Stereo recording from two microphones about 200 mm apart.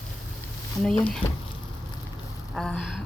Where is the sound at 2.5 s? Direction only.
5° left (ahead or behind).